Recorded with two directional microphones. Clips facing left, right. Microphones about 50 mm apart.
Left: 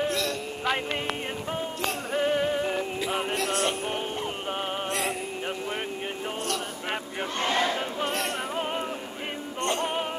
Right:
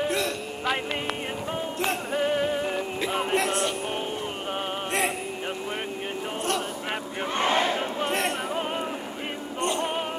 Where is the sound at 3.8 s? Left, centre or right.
Centre.